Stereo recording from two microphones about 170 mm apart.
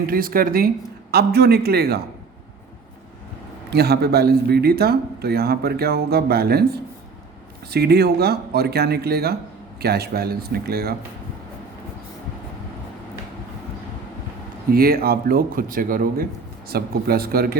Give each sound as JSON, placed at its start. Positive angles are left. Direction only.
{"t": 0.0, "sound": "speech", "side_deg": -60}
{"t": 3.7, "sound": "speech", "side_deg": -70}
{"t": 14.7, "sound": "speech", "side_deg": -60}